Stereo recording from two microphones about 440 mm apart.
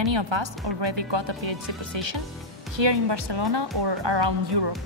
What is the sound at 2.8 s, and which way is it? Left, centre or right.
A woman's voice, right.